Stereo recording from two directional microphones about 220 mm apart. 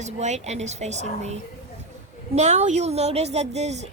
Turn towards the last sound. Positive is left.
turn(degrees=-30)  # may be behind; listen again after turning